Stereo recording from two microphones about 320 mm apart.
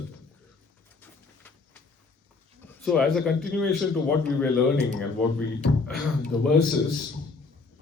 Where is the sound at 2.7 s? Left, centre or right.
Centre.